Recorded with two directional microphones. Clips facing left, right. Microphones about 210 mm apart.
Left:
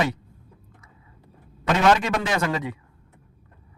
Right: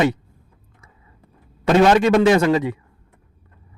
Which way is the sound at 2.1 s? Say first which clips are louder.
Right 10 dB; 25° right (ahead or behind).